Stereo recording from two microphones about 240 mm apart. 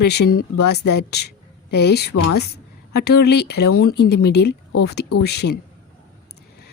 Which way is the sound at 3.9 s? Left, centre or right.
Left.